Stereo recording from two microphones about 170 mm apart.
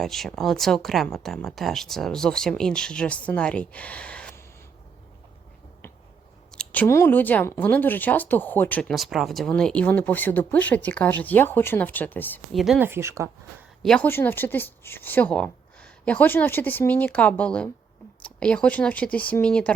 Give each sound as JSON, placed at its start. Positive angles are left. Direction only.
{"t": 0.0, "sound": "speech", "side_deg": 0}
{"t": 6.5, "sound": "speech", "side_deg": 5}
{"t": 12.5, "sound": "speech", "side_deg": 0}
{"t": 12.8, "sound": "speech", "side_deg": -15}
{"t": 13.8, "sound": "speech", "side_deg": 5}